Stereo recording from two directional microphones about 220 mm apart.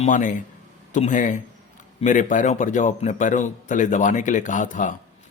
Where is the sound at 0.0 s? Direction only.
35° left (ahead or behind).